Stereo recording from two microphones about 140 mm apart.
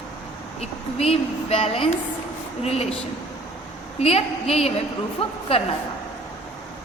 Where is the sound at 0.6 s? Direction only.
45° left (ahead or behind).